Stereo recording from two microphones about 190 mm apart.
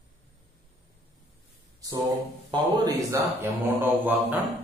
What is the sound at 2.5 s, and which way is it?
Speech, 20° right (ahead or behind).